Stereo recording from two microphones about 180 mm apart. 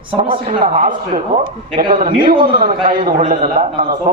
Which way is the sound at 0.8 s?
50° right (ahead or behind).